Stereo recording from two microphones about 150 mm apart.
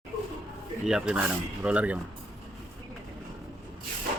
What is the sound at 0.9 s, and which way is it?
Speech, 5° right (ahead or behind).